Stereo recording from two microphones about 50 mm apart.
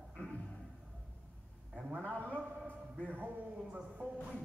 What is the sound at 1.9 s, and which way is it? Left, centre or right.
Speech, right.